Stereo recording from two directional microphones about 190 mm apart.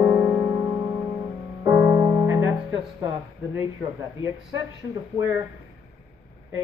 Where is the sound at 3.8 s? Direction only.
15° right (ahead or behind).